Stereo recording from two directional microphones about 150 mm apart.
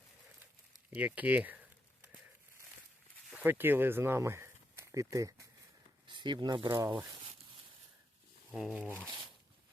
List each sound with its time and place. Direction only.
0.9 s a sound: 10° right (ahead or behind)
3.2 s speech: 10° right (ahead or behind)
6.1 s speech: 30° right (ahead or behind)
6.7 s speech: 20° right (ahead or behind)
8.5 s speech: 5° right (ahead or behind)